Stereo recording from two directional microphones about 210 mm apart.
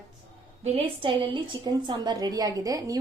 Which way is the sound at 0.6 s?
30° right (ahead or behind).